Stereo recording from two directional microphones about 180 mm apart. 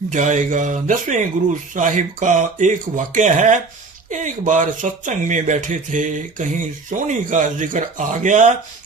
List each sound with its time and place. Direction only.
0.1 s speech: 45° right (ahead or behind)